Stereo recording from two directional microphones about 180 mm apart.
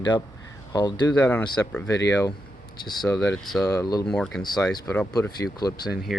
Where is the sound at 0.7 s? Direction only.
25° left (ahead or behind).